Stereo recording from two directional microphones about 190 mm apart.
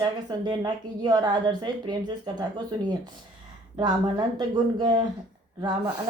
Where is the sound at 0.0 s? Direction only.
20° right (ahead or behind).